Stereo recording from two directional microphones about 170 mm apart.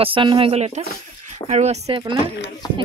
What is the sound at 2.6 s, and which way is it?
Speech, 25° left (ahead or behind).